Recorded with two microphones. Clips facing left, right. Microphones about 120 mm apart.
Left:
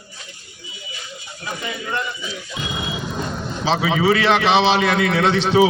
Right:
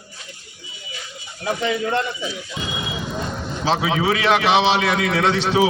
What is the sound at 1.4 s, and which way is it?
Speech, 75° right (ahead or behind).